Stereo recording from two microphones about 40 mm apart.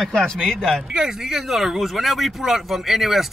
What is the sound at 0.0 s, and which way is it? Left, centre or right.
Speech, centre.